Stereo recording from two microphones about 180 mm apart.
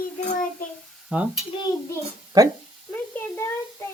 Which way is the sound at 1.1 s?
5° right (ahead or behind).